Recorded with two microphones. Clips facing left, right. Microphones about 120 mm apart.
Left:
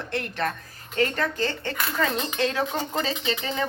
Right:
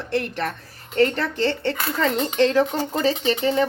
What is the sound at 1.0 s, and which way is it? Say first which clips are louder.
Speech: right 4 dB; 30° right (ahead or behind).